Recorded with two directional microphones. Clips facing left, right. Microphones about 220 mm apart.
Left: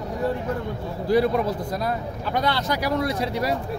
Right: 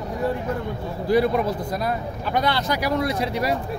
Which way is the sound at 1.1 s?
15° right (ahead or behind).